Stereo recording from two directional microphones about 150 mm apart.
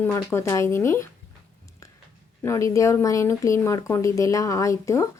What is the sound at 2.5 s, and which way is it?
A woman's voice, 20° left (ahead or behind).